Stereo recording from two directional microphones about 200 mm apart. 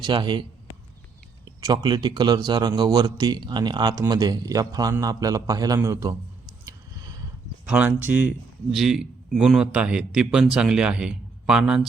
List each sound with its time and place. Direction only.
0.0 s a man's voice: 25° right (ahead or behind)
1.6 s a man's voice: 20° right (ahead or behind)
6.7 s a sound: 20° right (ahead or behind)
7.6 s a man's voice: 5° right (ahead or behind)